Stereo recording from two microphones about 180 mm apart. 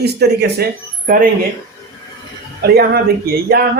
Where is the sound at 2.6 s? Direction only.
60° right (ahead or behind).